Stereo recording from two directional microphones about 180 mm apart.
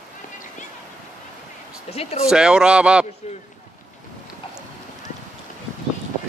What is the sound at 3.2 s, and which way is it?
Speech, 35° left (ahead or behind).